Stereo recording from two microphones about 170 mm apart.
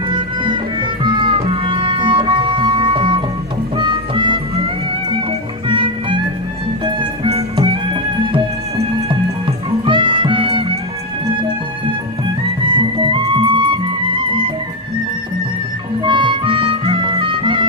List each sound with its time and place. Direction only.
0.4 s music: 30° right (ahead or behind)
5.6 s music: 30° right (ahead or behind)
9.8 s music: 30° right (ahead or behind)
12.7 s music: 30° right (ahead or behind)
16.0 s music: 30° right (ahead or behind)